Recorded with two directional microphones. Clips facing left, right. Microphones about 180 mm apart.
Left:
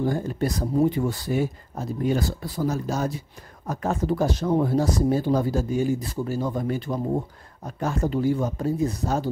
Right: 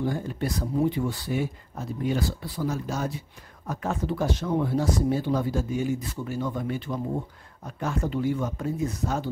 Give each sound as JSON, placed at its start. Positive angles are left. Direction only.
{"t": 0.0, "sound": "speech", "side_deg": 40}